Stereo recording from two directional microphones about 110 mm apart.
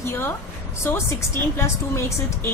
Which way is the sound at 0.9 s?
25° left (ahead or behind).